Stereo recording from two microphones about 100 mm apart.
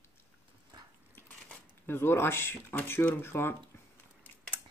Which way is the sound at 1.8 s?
25° left (ahead or behind).